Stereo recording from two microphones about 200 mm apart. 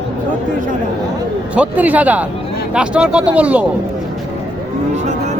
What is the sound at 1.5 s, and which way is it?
Speech, 5° right (ahead or behind).